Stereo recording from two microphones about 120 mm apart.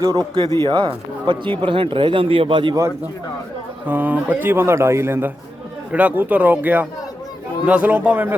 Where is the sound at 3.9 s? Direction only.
15° right (ahead or behind).